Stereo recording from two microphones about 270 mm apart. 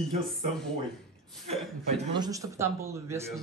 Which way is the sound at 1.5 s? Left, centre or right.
Centre.